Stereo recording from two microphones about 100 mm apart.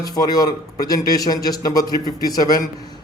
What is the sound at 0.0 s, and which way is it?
Speech, 40° left (ahead or behind).